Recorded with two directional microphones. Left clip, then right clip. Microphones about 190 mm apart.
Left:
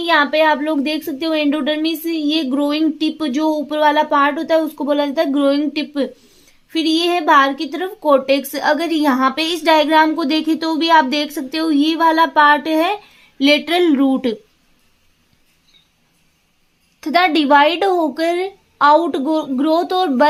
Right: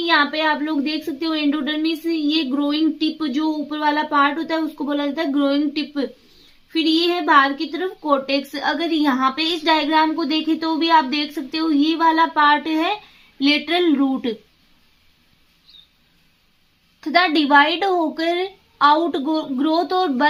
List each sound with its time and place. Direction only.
0.0 s a woman's voice: 35° left (ahead or behind)
17.0 s a woman's voice: 35° left (ahead or behind)